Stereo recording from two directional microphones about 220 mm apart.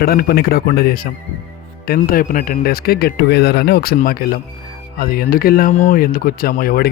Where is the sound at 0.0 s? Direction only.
45° left (ahead or behind).